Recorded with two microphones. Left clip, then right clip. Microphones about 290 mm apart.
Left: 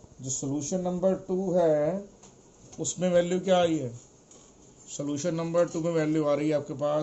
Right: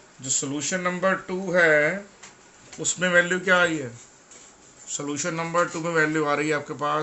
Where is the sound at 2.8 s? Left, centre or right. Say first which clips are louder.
Right 4 dB; right.